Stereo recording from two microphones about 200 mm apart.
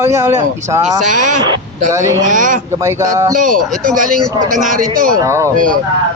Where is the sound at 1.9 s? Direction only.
15° right (ahead or behind).